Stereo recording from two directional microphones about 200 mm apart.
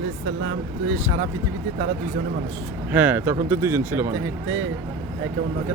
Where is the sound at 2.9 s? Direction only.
10° right (ahead or behind).